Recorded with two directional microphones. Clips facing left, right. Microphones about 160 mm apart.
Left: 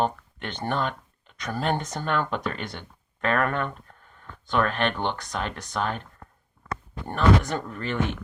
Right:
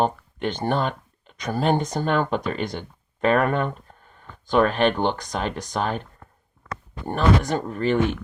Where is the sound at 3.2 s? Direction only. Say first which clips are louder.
Right 5 dB; 15° right (ahead or behind).